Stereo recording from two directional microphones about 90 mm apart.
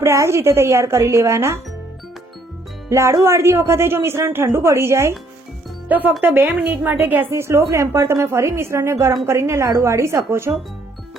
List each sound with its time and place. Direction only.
0.0 s a woman's voice: 30° right (ahead or behind)
2.9 s a woman's voice: 35° right (ahead or behind)